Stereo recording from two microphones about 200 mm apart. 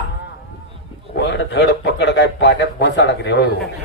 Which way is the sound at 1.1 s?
60° left (ahead or behind).